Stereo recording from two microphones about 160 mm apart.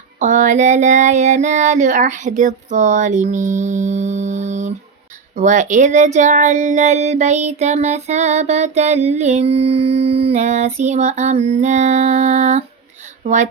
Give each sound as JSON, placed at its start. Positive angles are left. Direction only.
{"t": 0.2, "sound": "speech", "side_deg": -50}